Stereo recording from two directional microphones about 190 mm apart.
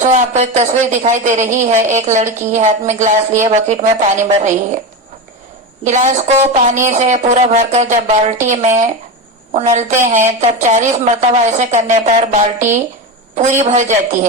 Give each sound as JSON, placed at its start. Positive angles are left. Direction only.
{"t": 0.0, "sound": "a woman's voice", "side_deg": -40}
{"t": 5.8, "sound": "a woman's voice", "side_deg": -40}